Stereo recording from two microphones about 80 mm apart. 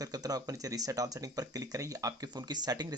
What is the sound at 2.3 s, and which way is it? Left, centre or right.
Speech, right.